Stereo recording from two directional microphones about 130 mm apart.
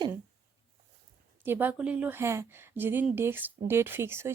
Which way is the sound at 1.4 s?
15° right (ahead or behind).